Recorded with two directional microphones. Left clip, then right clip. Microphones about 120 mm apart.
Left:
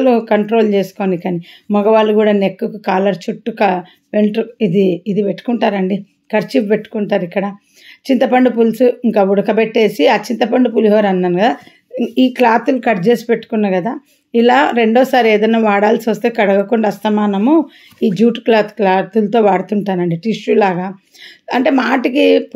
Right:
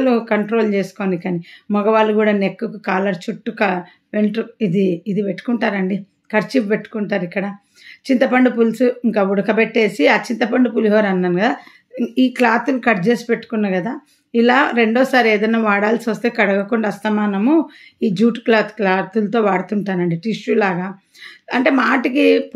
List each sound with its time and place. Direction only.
0.0 s speech: 25° left (ahead or behind)